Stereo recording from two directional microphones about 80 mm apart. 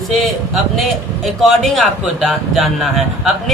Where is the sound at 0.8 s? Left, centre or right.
Centre.